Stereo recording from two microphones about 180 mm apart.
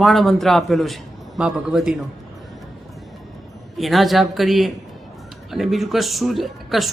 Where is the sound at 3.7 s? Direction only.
Centre (ahead or behind).